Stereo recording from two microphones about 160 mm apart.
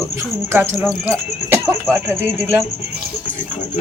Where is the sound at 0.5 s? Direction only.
15° right (ahead or behind).